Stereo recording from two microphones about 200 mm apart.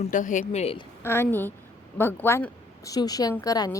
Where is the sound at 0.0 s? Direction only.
40° left (ahead or behind).